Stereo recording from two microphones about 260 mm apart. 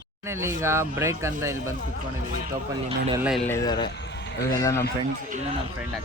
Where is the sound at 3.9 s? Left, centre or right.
Left.